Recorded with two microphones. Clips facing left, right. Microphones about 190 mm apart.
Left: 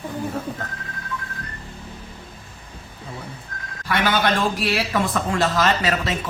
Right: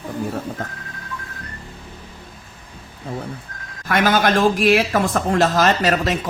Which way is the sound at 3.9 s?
45° right (ahead or behind).